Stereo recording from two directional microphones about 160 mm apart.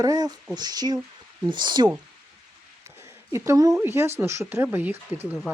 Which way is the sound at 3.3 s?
15° right (ahead or behind).